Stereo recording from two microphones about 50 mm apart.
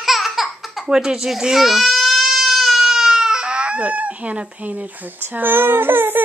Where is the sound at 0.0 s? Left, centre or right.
Centre.